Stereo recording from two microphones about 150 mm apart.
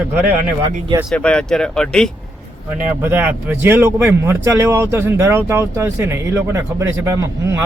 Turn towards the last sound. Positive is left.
turn(degrees=-20)  # may be behind; listen again after turning